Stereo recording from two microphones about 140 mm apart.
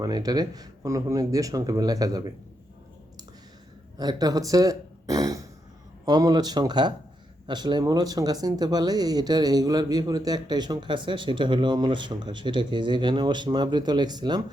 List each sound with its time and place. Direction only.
0.0 s speech: 30° right (ahead or behind)
3.9 s speech: 25° right (ahead or behind)